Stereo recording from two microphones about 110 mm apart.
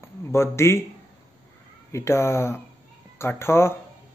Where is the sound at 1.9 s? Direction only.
25° left (ahead or behind).